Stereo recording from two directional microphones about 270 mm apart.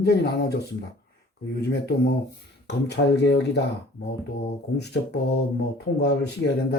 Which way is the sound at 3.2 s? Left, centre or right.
Left.